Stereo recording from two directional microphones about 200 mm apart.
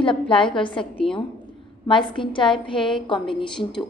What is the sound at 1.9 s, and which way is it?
A woman's voice, 25° left (ahead or behind).